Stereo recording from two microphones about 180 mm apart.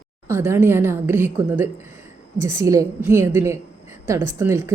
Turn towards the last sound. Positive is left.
turn(degrees=-15)  # may be behind; listen again after turning